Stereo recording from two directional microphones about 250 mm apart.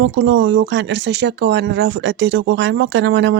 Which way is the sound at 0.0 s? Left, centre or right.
Right.